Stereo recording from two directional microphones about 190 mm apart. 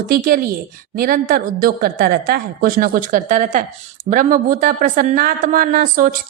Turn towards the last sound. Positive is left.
turn(degrees=-45)  # may be behind; listen again after turning